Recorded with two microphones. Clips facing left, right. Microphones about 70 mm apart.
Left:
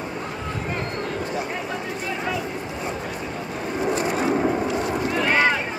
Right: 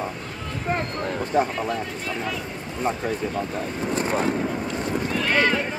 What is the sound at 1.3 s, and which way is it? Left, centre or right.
Speech, right.